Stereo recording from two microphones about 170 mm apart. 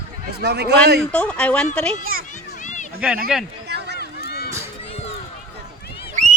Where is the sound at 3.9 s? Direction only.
70° left (ahead or behind).